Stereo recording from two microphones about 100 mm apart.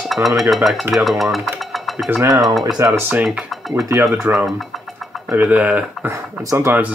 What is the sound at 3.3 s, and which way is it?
Speech, centre (ahead or behind).